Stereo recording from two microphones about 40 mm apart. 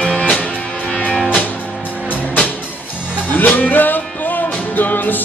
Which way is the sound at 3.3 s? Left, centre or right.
Left.